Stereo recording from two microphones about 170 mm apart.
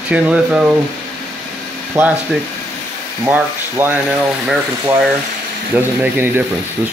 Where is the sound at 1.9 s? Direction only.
10° right (ahead or behind).